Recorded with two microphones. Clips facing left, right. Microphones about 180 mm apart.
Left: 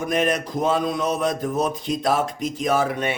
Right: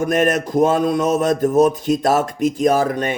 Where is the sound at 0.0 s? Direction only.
50° right (ahead or behind).